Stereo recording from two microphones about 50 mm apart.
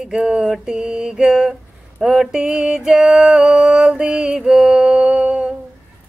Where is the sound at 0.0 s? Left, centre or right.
Centre.